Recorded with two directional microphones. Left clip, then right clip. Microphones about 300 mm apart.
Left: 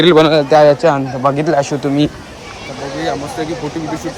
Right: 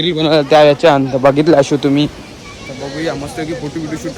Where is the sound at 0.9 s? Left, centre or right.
Right.